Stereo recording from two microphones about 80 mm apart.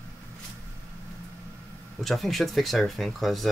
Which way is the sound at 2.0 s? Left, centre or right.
Centre.